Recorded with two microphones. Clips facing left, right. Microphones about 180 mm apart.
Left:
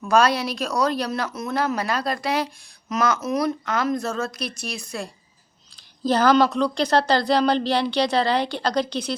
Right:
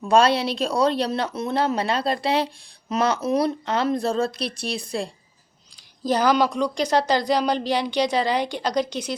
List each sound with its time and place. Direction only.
0.1 s speech: 30° right (ahead or behind)
6.1 s speech: 15° right (ahead or behind)